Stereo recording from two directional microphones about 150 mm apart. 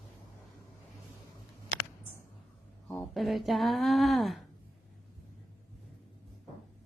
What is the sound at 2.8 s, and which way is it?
Speech, 5° left (ahead or behind).